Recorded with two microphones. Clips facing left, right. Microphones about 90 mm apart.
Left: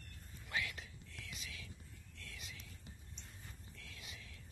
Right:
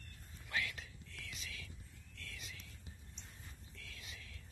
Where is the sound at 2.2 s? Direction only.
20° left (ahead or behind).